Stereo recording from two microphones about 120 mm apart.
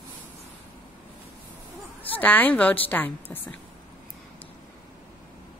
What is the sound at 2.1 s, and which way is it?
A woman's voice, 15° left (ahead or behind).